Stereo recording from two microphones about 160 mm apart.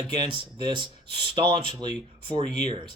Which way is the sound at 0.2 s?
30° right (ahead or behind).